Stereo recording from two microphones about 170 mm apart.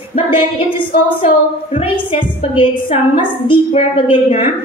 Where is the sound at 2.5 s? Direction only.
30° left (ahead or behind).